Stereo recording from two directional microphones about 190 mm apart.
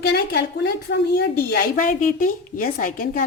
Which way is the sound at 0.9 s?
60° left (ahead or behind).